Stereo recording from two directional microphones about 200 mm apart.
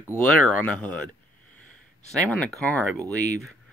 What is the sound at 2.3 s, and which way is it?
Speech, 5° left (ahead or behind).